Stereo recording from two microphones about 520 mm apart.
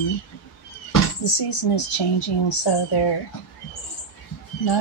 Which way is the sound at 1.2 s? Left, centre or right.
Left.